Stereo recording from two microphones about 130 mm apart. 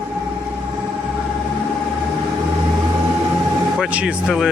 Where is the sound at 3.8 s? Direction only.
10° right (ahead or behind).